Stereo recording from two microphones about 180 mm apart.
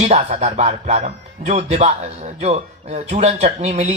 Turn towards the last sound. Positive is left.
turn(degrees=-40)  # may be behind; listen again after turning